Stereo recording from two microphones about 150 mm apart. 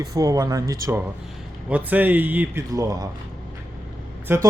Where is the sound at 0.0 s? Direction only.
25° right (ahead or behind).